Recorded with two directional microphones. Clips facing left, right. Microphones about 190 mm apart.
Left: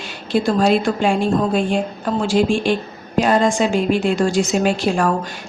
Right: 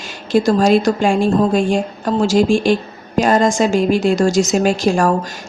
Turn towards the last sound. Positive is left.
turn(degrees=-45)  # may be behind; listen again after turning